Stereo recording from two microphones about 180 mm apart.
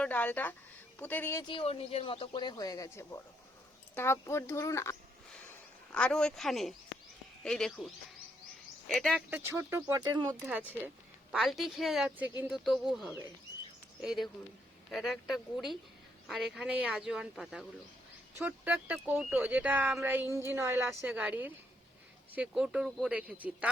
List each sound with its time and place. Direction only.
0.0 s speech: 10° left (ahead or behind)
1.5 s speech: 30° left (ahead or behind); by 4.9 s 15° left (ahead or behind)
5.9 s speech: 5° left (ahead or behind)
9.3 s speech: 15° right (ahead or behind)
11.3 s speech: centre (ahead or behind)